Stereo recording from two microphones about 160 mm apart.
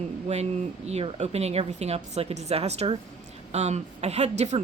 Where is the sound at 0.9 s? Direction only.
40° right (ahead or behind).